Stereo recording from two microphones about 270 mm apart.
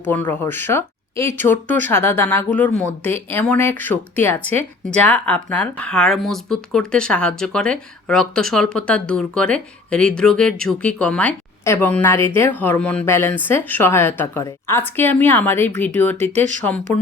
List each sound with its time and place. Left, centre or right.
0.1 s speech: centre
16.3 s speech: right
16.6 s speech: centre